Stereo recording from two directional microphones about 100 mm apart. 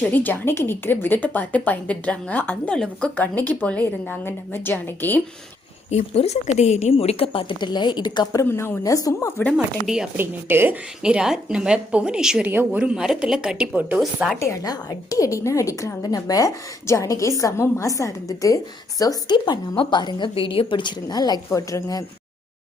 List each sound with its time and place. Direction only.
0.1 s a woman's voice: 20° left (ahead or behind)
5.9 s a woman's voice: 90° left; by 8.3 s 50° left (ahead or behind)
8.4 s a woman's voice: 25° left (ahead or behind)
9.8 s speech: 5° right (ahead or behind)
10.2 s speech: 20° right (ahead or behind)
11.0 s a woman's voice: 10° right (ahead or behind)
14.0 s speech: centre (ahead or behind)
14.3 s a woman's voice: 30° left (ahead or behind)
19.7 s a woman's voice: 55° left (ahead or behind); by 22.0 s 35° left (ahead or behind)